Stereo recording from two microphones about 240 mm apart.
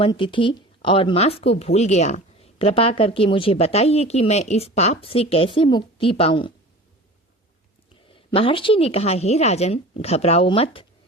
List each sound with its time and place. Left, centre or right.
0.0 s speech: left
8.1 s speech: left